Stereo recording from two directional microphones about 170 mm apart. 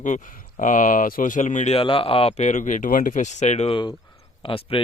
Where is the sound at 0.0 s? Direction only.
45° left (ahead or behind).